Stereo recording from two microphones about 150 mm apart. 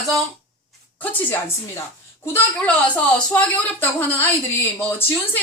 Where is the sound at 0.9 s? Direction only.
15° left (ahead or behind).